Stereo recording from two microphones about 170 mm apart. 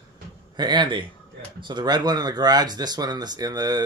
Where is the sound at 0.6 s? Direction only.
25° right (ahead or behind).